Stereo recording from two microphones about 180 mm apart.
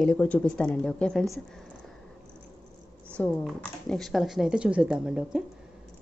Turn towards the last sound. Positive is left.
turn(degrees=-5)  # may be behind; listen again after turning